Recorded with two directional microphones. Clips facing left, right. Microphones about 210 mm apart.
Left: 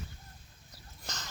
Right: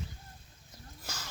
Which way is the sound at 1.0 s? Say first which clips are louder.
Even; 10° right (ahead or behind).